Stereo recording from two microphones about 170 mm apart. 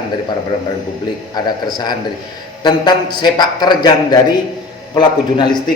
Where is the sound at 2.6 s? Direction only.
25° left (ahead or behind).